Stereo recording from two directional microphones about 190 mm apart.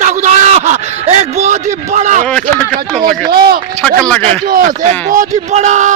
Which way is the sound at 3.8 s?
5° left (ahead or behind).